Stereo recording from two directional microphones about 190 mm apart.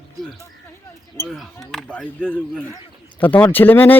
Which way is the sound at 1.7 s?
5° left (ahead or behind).